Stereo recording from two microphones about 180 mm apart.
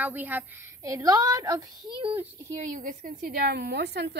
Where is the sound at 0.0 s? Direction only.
10° right (ahead or behind).